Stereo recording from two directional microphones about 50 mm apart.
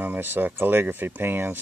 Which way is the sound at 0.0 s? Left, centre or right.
Right.